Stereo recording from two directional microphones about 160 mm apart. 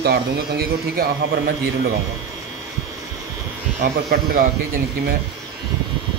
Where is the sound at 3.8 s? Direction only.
70° right (ahead or behind).